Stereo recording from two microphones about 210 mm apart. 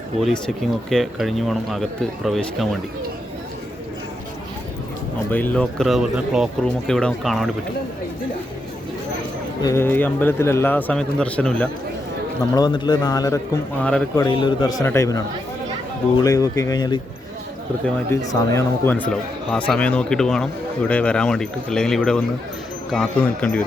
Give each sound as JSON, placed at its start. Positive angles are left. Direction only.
{"t": 0.2, "sound": "speech", "side_deg": 0}
{"t": 5.3, "sound": "speech", "side_deg": 10}
{"t": 9.6, "sound": "a man's voice", "side_deg": 10}
{"t": 12.5, "sound": "speech", "side_deg": 20}
{"t": 13.8, "sound": "speech", "side_deg": 5}
{"t": 14.2, "sound": "a man's voice", "side_deg": 20}
{"t": 16.2, "sound": "a man's voice", "side_deg": 15}